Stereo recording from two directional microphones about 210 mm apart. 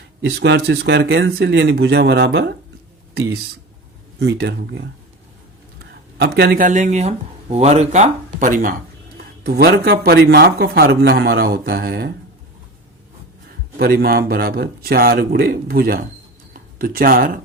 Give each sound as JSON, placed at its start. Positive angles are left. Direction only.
{"t": 0.2, "sound": "speech", "side_deg": -55}
{"t": 13.7, "sound": "speech", "side_deg": -45}